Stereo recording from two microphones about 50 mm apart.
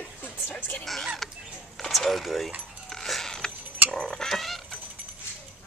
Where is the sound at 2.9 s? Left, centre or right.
Centre.